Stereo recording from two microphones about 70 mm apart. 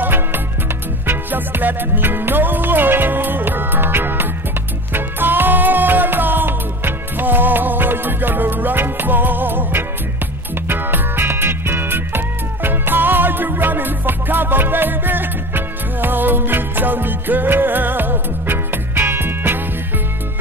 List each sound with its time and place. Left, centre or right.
0.0 s music: right